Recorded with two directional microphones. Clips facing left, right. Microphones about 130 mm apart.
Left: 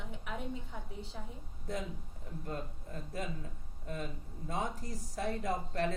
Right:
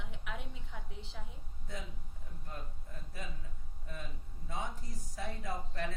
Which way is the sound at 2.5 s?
60° left (ahead or behind).